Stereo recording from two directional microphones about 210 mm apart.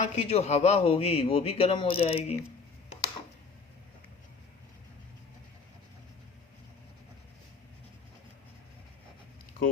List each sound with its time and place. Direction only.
0.0 s a man's voice: 30° left (ahead or behind)